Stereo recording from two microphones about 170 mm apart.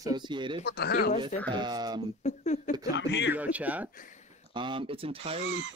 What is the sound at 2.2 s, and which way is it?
Speech, 45° left (ahead or behind).